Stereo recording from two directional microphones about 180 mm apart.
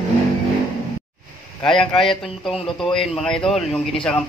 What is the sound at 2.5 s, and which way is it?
Speech, 30° left (ahead or behind).